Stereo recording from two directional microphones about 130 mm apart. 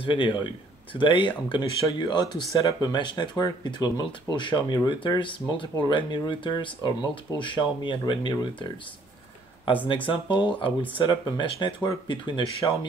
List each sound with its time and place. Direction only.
0.0 s speech: 40° left (ahead or behind)
10.0 s speech: 35° left (ahead or behind)